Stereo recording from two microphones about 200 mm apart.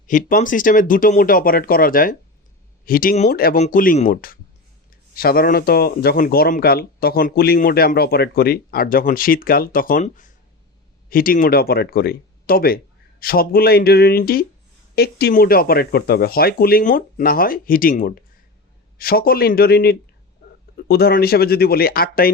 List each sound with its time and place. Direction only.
0.1 s speech: 40° left (ahead or behind)